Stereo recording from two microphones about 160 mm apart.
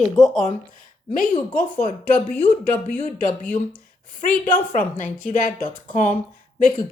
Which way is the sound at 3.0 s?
55° left (ahead or behind).